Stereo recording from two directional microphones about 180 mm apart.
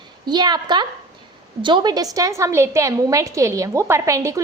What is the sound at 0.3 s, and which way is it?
A woman's voice, 25° right (ahead or behind).